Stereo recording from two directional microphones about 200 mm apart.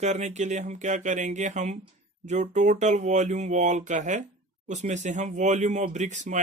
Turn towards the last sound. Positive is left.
turn(degrees=-35)  # may be behind; listen again after turning